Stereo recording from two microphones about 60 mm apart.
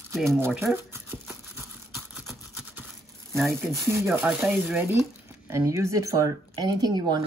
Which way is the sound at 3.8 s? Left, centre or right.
Right.